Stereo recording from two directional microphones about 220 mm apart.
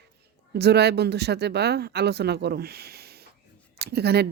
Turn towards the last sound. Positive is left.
turn(degrees=-50)  # may be behind; listen again after turning